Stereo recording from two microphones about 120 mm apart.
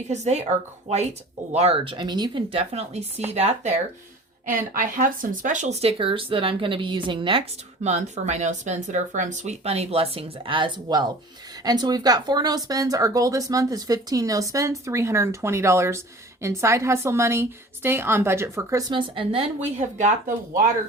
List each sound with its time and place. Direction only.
0.1 s speech: 70° right (ahead or behind)
1.5 s a woman's voice: 55° right (ahead or behind); by 2.4 s 40° right (ahead or behind)
2.5 s speech: 55° right (ahead or behind)
4.8 s speech: 90° right
5.8 s a woman's voice: 45° right (ahead or behind)
7.9 s speech: 70° right (ahead or behind); by 18.9 s 25° right (ahead or behind)
18.9 s a woman's voice: 45° right (ahead or behind)
19.5 s speech: 75° right (ahead or behind)